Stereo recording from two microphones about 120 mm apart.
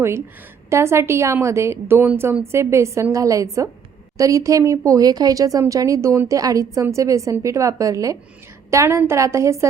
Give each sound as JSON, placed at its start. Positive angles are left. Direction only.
{"t": 0.7, "sound": "a woman's voice", "side_deg": -20}